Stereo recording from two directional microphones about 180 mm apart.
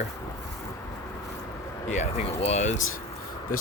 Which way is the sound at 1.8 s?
40° left (ahead or behind).